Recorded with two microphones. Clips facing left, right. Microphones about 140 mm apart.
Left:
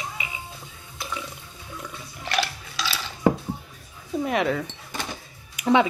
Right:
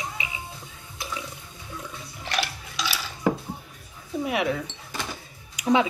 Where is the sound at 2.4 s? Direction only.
20° right (ahead or behind).